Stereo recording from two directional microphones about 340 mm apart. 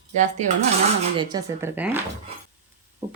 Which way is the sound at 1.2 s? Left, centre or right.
Centre.